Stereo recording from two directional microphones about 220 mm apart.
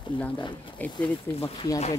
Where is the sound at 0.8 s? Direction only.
5° left (ahead or behind).